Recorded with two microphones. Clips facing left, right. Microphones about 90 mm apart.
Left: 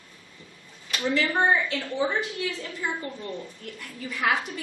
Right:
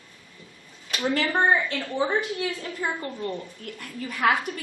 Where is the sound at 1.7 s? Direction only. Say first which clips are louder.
Right 1 dB; 45° right (ahead or behind).